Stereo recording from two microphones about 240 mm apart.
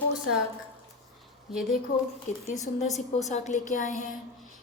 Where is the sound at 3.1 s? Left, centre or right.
Left.